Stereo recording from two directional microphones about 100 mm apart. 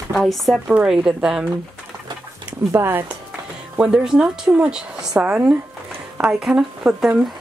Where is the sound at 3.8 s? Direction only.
10° right (ahead or behind).